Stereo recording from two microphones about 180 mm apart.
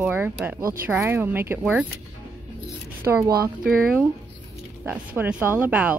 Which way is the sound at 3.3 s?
55° right (ahead or behind).